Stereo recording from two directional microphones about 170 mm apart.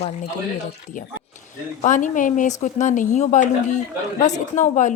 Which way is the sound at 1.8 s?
50° left (ahead or behind).